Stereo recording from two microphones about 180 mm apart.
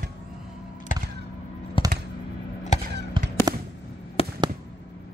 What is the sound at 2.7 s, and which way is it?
Basketball bounce, 40° left (ahead or behind).